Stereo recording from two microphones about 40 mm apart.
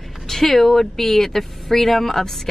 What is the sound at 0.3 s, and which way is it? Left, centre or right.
Speech, centre.